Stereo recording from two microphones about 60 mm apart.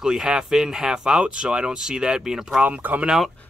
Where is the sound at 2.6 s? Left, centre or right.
Right.